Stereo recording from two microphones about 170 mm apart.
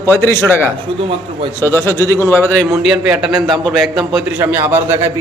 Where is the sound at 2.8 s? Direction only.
5° right (ahead or behind).